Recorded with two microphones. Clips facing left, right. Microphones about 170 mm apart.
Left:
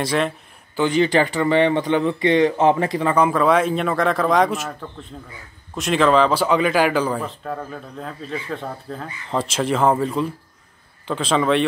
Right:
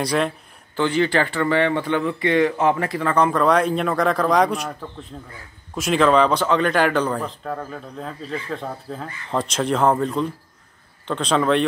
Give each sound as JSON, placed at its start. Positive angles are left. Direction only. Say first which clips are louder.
{"t": 0.0, "sound": "a man's voice", "louder": "even", "side_deg": 0}
{"t": 0.7, "sound": "speech", "louder": "left 2 dB", "side_deg": 15}
{"t": 3.2, "sound": "a man's voice", "louder": "even", "side_deg": 5}